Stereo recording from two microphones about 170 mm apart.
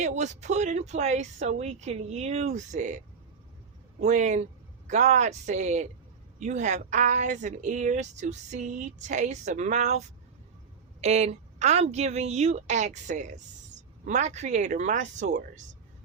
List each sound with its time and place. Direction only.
0.0 s speech: 45° right (ahead or behind)
4.0 s a woman's voice: 45° right (ahead or behind)
11.0 s a woman's voice: 40° right (ahead or behind)